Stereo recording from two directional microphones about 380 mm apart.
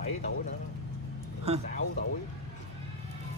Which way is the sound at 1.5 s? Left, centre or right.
Centre.